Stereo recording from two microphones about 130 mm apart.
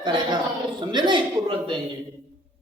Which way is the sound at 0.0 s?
35° right (ahead or behind).